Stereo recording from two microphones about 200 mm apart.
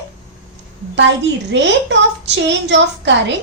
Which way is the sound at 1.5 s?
60° right (ahead or behind).